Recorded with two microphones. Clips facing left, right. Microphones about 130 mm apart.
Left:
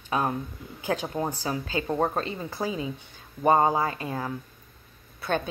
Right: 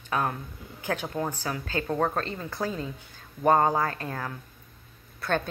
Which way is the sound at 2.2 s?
10° left (ahead or behind).